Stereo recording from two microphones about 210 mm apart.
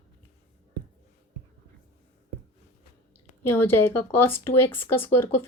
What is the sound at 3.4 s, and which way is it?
A woman's voice, 10° left (ahead or behind).